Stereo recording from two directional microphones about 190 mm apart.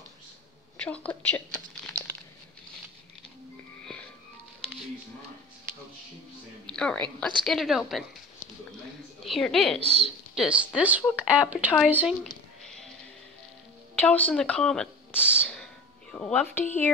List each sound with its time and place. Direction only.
0.7 s a woman's voice: 5° left (ahead or behind)
6.7 s speech: 5° left (ahead or behind)
9.2 s a woman's voice: centre (ahead or behind)
9.8 s speech: 30° right (ahead or behind)
10.3 s speech: centre (ahead or behind)
11.5 s a sound: 5° right (ahead or behind)
13.9 s speech: 5° left (ahead or behind)